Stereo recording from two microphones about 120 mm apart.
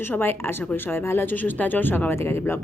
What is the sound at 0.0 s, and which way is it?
Speech, 20° left (ahead or behind).